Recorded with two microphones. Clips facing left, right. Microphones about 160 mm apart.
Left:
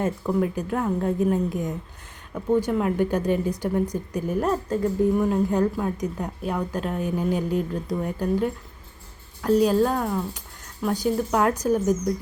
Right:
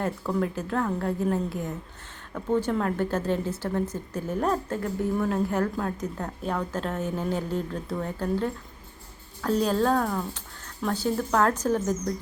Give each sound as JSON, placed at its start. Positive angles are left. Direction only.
{"t": 0.0, "sound": "a woman's voice", "side_deg": 15}